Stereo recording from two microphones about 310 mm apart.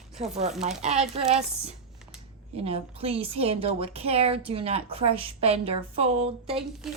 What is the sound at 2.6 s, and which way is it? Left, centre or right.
A woman's voice, centre.